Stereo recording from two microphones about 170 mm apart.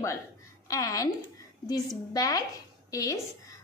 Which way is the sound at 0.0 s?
20° left (ahead or behind).